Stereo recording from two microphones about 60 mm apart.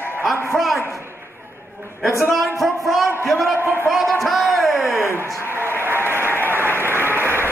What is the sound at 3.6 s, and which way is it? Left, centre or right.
Speech, right.